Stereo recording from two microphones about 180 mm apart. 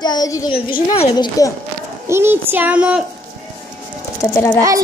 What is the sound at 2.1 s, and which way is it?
Speech, 15° right (ahead or behind).